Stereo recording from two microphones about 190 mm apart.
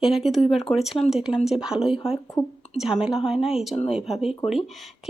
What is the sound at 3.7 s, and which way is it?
Speech, 35° left (ahead or behind).